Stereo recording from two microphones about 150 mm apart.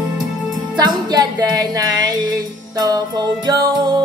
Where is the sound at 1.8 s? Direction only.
25° right (ahead or behind).